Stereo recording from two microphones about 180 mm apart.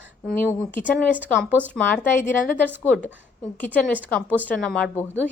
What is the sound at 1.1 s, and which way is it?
Speech, 10° right (ahead or behind).